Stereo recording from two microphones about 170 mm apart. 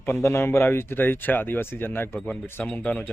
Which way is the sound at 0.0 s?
15° left (ahead or behind).